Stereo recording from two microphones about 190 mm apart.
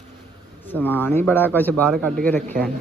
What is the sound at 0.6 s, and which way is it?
A man's voice, 10° left (ahead or behind).